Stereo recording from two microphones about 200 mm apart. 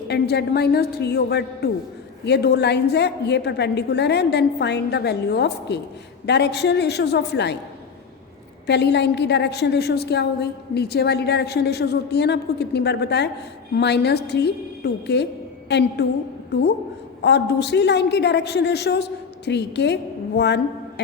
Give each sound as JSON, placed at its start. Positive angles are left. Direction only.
{"t": 0.1, "sound": "a woman's voice", "side_deg": 55}
{"t": 8.6, "sound": "a woman's voice", "side_deg": 60}